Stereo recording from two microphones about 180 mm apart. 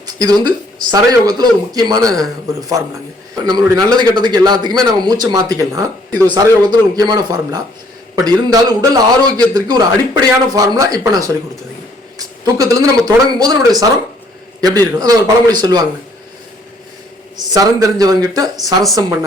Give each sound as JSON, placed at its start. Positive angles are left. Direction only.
{"t": 0.1, "sound": "a man's voice", "side_deg": -20}
{"t": 17.3, "sound": "a man's voice", "side_deg": -20}